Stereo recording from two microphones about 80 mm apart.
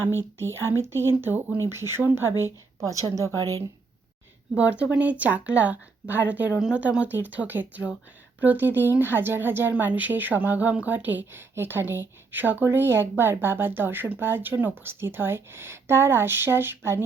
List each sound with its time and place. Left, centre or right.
0.0 s speech: right
2.8 s a woman's voice: right
4.5 s speech: centre